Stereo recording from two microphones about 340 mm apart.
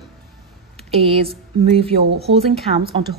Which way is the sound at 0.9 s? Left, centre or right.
Centre.